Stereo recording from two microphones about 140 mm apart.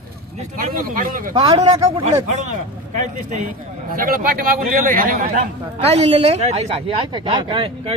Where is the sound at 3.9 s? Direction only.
90° right.